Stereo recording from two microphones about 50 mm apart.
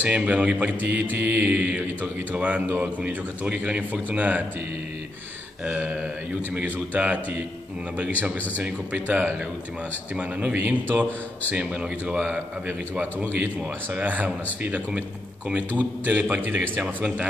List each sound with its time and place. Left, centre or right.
0.0 s a man's voice: right
1.5 s a man's voice: right
5.7 s a man's voice: right
8.6 s a man's voice: right
10.6 s a man's voice: right
11.5 s a man's voice: right
12.6 s a man's voice: right